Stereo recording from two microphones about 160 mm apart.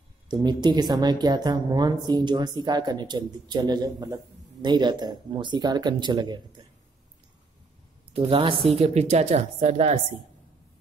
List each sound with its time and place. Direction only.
0.3 s a woman's voice: 25° right (ahead or behind)
8.1 s a woman's voice: 35° right (ahead or behind)